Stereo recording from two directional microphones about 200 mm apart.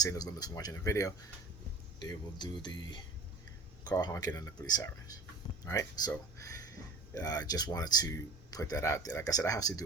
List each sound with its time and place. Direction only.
0.0 s speech: 20° left (ahead or behind)